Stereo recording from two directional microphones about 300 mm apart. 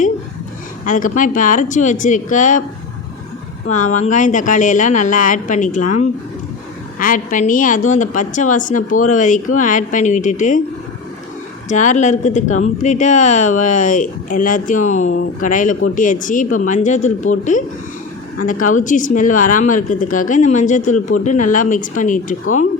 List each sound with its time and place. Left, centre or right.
0.9 s speech: left
3.7 s speech: left
7.0 s speech: left
11.7 s speech: left
18.6 s speech: left